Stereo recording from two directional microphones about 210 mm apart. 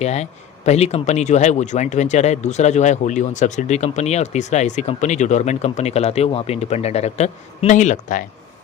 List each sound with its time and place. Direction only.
0.0 s speech: 30° left (ahead or behind)